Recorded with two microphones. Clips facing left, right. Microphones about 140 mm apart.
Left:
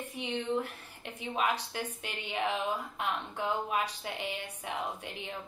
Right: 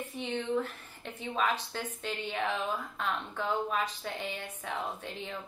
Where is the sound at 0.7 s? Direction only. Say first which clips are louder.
Right 1 dB; 15° left (ahead or behind).